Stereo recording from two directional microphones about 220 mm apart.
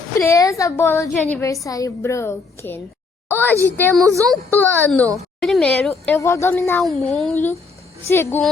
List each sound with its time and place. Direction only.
0.2 s a child's voice: 15° left (ahead or behind)